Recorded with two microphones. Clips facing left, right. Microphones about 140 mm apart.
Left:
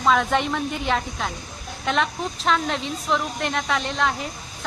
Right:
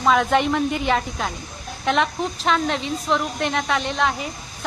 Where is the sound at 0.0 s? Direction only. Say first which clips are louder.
Right 2 dB; centre (ahead or behind).